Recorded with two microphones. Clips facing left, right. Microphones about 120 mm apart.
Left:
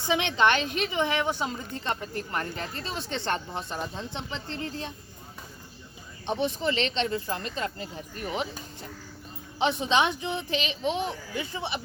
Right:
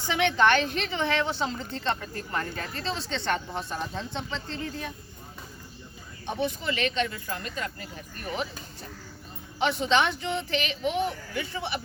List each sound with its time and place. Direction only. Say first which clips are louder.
0.0 s a woman's voice: right 1 dB; 20° left (ahead or behind)
6.2 s speech: left 2 dB; 25° left (ahead or behind)